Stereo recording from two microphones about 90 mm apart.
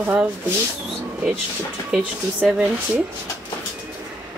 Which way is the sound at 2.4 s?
10° right (ahead or behind).